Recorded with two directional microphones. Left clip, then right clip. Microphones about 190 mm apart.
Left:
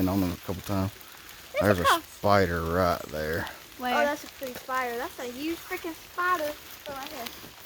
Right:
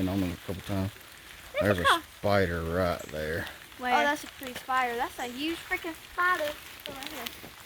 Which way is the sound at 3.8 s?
55° left (ahead or behind).